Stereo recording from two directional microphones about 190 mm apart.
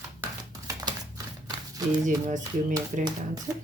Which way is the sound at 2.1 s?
40° right (ahead or behind).